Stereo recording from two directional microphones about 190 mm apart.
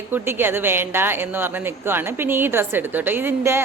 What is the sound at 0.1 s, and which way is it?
A woman's voice, 10° right (ahead or behind).